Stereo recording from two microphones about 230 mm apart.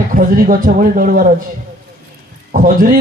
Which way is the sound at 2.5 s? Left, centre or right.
Right.